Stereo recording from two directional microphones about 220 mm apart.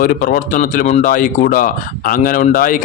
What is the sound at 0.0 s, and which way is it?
Speech, 40° left (ahead or behind).